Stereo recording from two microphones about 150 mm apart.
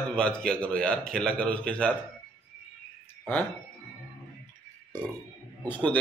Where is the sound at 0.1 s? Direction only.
5° left (ahead or behind).